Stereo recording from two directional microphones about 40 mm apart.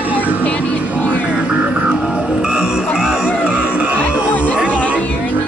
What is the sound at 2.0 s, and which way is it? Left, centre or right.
Music, right.